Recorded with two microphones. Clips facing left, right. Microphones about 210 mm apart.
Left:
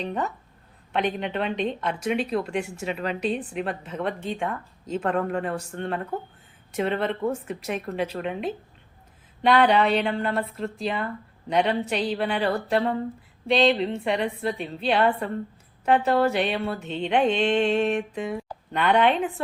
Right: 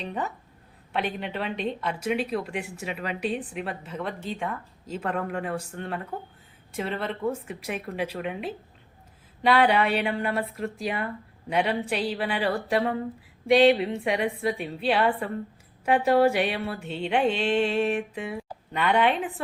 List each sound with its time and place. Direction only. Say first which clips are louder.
0.9 s a woman's voice: left 4 dB; 5° right (ahead or behind)
2.0 s mantra: left 2 dB; 5° right (ahead or behind)
3.9 s speech: left 4 dB; 55° left (ahead or behind)
5.1 s mantra: left 3 dB; 5° right (ahead or behind)
6.7 s speech: left 5 dB; 55° left (ahead or behind)
7.4 s mantra: left 3 dB; 10° right (ahead or behind)